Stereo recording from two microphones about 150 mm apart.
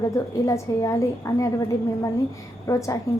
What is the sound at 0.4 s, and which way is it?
A woman's voice, 20° left (ahead or behind).